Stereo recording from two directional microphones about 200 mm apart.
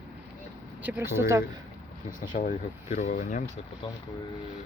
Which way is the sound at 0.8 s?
10° right (ahead or behind).